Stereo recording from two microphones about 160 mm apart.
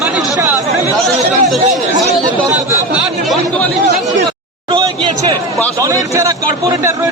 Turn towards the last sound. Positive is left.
turn(degrees=-20)  # may be behind; listen again after turning